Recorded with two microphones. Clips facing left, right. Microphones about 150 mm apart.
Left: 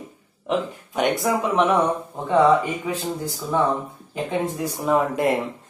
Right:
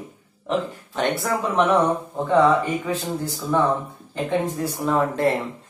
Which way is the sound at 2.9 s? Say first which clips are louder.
Right 1 dB; 10° left (ahead or behind).